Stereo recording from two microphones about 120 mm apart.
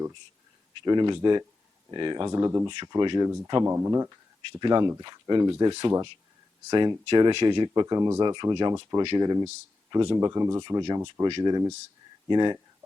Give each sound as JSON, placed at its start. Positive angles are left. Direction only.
{"t": 0.8, "sound": "speech", "side_deg": -40}
{"t": 2.6, "sound": "speech", "side_deg": -35}